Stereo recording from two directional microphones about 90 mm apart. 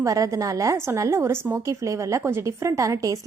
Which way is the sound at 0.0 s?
40° right (ahead or behind).